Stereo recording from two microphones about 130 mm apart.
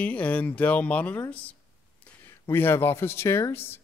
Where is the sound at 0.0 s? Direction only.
10° left (ahead or behind).